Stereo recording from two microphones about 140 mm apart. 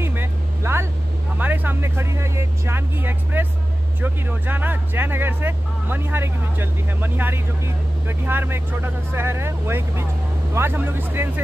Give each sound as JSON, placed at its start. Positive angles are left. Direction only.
{"t": 0.0, "sound": "vehicle", "side_deg": -15}
{"t": 1.4, "sound": "speech", "side_deg": -15}